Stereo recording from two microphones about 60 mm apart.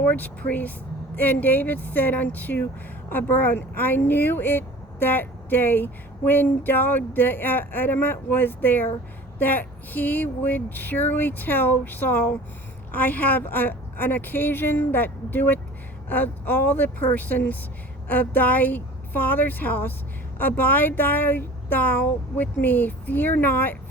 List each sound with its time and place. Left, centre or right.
0.0 s speech: left